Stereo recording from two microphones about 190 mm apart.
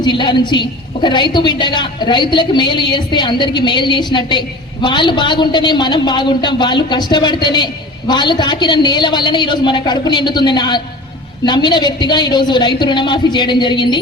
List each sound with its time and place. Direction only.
0.0 s a woman's voice: 25° left (ahead or behind)